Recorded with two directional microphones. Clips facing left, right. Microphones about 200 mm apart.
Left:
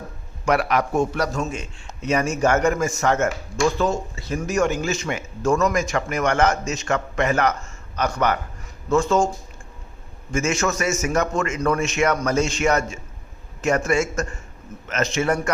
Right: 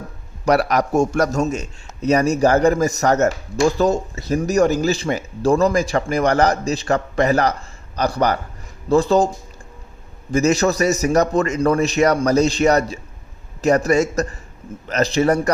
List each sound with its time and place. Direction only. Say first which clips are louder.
0.4 s a man's voice: right 3 dB; 40° right (ahead or behind)
10.3 s a man's voice: right 6 dB; 35° right (ahead or behind)